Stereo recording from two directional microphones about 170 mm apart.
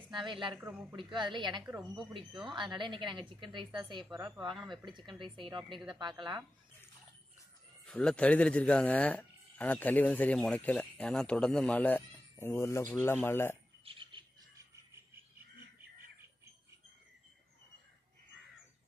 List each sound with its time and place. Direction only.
0.0 s speech: 30° right (ahead or behind)
0.6 s speech: 10° right (ahead or behind)
0.9 s a woman's voice: 25° right (ahead or behind)
7.8 s speech: 5° left (ahead or behind)
13.8 s bird: 30° right (ahead or behind)